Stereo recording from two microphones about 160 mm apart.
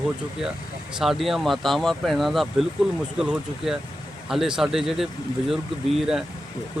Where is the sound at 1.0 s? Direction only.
Centre (ahead or behind).